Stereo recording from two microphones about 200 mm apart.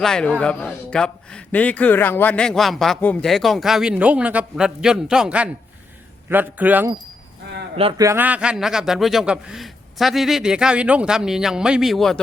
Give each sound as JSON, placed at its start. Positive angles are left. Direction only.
{"t": 0.0, "sound": "a man's voice", "side_deg": 5}
{"t": 7.8, "sound": "speech", "side_deg": -25}
{"t": 8.0, "sound": "a man's voice", "side_deg": -10}